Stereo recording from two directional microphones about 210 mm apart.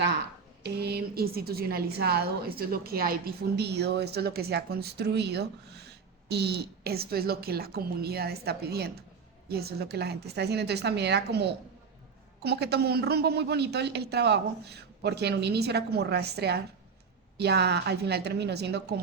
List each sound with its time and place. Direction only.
0.6 s a woman's voice: 50° right (ahead or behind)